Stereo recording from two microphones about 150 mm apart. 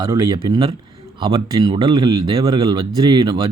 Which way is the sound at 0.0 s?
30° right (ahead or behind).